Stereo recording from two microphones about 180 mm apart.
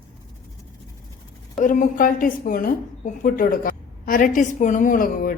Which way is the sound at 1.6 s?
50° left (ahead or behind).